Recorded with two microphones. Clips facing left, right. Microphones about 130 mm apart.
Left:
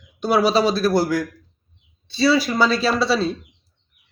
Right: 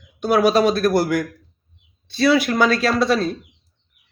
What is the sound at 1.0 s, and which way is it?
Speech, centre (ahead or behind).